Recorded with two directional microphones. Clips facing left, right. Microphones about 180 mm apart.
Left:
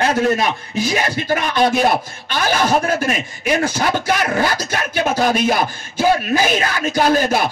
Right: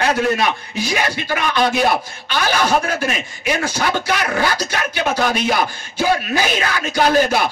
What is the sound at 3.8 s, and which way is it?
A man's voice, 45° left (ahead or behind).